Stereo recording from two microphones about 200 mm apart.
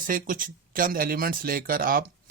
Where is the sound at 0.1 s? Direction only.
45° right (ahead or behind).